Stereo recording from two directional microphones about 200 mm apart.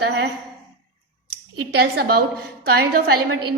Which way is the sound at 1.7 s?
50° right (ahead or behind).